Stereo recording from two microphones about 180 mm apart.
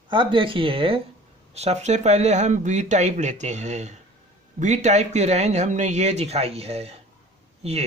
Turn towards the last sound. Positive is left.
turn(degrees=-35)  # may be behind; listen again after turning